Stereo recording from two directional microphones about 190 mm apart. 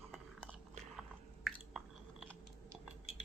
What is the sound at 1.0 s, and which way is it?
Chewing, centre (ahead or behind).